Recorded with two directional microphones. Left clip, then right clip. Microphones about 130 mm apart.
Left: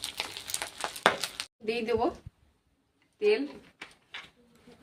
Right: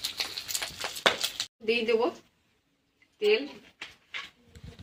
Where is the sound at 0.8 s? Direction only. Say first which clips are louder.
Even; 25° left (ahead or behind).